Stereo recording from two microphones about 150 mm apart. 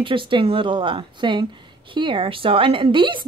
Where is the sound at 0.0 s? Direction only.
35° right (ahead or behind).